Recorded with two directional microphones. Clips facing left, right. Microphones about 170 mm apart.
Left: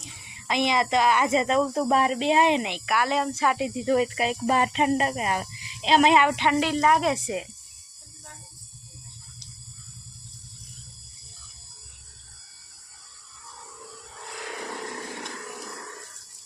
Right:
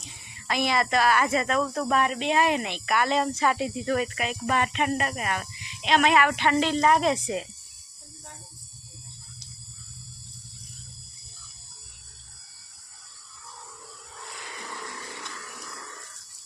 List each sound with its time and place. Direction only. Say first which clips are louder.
0.3 s speech: left 2 dB; 20° left (ahead or behind)
2.8 s speech: right 4 dB; 5° left (ahead or behind)
3.8 s speech: left 4 dB; 20° left (ahead or behind)
14.4 s a sound: left 6 dB; 65° left (ahead or behind)